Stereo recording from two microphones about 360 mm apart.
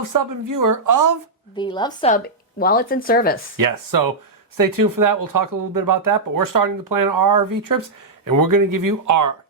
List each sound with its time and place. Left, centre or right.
0.0 s speech: right
1.5 s speech: centre
3.6 s speech: right